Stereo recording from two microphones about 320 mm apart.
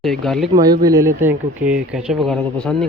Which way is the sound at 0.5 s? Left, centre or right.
Centre.